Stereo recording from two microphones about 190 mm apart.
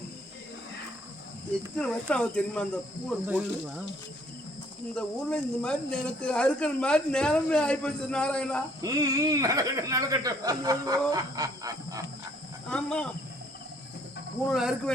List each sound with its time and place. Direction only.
1.8 s speech: 5° left (ahead or behind)
3.2 s speech: 5° right (ahead or behind)
4.9 s speech: 5° left (ahead or behind)
8.8 s speech: 20° right (ahead or behind)
12.6 s speech: 5° left (ahead or behind)
14.5 s speech: centre (ahead or behind)